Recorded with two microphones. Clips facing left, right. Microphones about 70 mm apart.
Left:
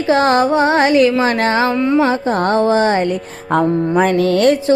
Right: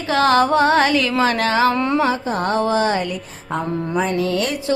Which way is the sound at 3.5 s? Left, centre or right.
Left.